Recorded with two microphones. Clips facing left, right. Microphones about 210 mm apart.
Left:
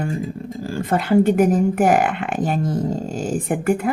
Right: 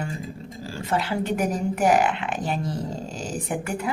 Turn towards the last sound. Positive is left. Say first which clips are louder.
# left 8 dB
turn(degrees=50)  # may be behind; listen again after turning